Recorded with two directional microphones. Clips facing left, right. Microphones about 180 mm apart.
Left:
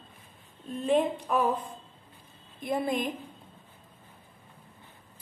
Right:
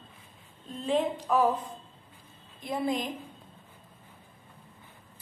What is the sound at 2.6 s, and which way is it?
Speech, 55° left (ahead or behind).